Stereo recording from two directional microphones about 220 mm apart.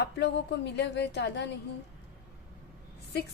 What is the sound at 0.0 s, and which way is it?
A woman's voice, 50° left (ahead or behind).